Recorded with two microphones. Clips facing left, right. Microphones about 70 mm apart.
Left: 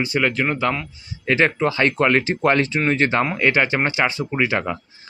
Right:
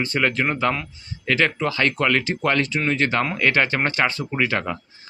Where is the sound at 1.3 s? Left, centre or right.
Left.